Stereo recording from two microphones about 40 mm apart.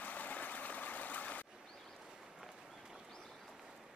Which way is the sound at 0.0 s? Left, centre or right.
Left.